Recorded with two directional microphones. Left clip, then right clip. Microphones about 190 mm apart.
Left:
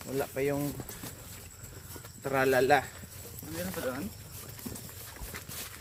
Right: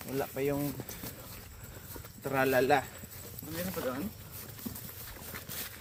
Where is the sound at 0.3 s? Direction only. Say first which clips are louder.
Left 2 dB; 15° left (ahead or behind).